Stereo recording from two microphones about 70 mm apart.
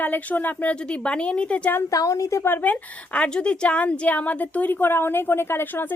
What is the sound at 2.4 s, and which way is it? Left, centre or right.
A woman's voice, left.